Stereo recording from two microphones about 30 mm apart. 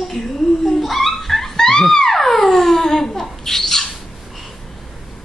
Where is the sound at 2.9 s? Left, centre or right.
Left.